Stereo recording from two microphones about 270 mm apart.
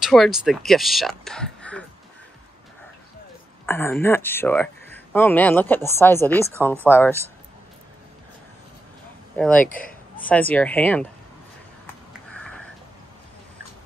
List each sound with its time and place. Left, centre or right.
0.0 s speech: centre
3.6 s speech: centre
9.4 s speech: centre
9.7 s speech: left
10.2 s speech: centre
12.3 s a sound: centre